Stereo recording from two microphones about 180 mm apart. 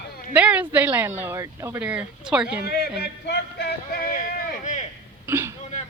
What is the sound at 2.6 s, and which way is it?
Music, 60° left (ahead or behind).